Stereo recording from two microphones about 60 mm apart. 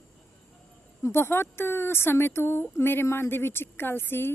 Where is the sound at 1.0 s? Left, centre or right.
Left.